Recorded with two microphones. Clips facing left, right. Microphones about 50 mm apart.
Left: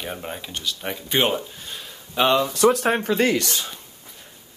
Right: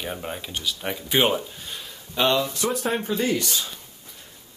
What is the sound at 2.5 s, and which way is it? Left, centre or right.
Speech, left.